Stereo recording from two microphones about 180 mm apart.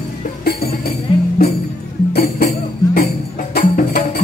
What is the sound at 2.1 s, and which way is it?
Music, 55° left (ahead or behind).